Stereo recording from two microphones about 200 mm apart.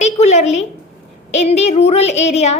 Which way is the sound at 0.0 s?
35° left (ahead or behind).